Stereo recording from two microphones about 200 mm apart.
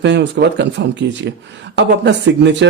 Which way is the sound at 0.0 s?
60° right (ahead or behind).